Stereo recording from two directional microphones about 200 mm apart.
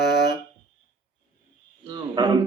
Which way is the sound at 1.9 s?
20° right (ahead or behind).